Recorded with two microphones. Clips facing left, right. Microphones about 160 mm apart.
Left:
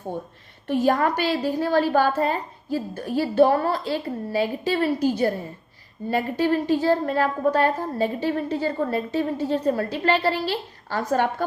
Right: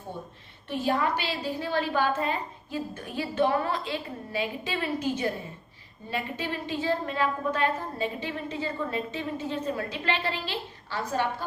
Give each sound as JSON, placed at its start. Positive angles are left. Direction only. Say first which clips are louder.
{"t": 0.7, "sound": "a woman's voice", "louder": "left 6 dB", "side_deg": 45}